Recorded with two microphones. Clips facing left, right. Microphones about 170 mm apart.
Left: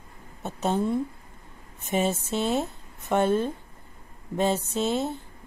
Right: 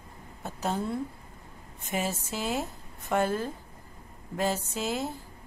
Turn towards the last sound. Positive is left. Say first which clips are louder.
# left 5 dB
turn(degrees=25)  # may be behind; listen again after turning